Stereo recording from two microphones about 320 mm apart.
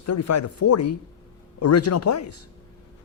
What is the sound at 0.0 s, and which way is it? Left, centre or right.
Speech, left.